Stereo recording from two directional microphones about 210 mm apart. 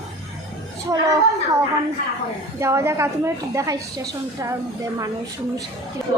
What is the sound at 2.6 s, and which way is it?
A child's voice, 15° right (ahead or behind).